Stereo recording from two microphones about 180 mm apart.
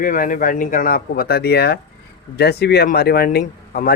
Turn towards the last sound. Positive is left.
turn(degrees=60)  # may be behind; listen again after turning